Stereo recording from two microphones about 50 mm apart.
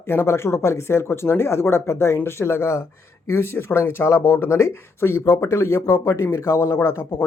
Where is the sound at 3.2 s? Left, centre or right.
Left.